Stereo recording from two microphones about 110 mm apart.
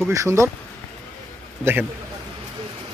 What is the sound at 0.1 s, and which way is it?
Speech, 30° right (ahead or behind).